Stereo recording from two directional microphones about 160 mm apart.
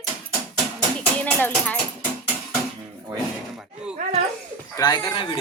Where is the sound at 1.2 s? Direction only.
10° left (ahead or behind).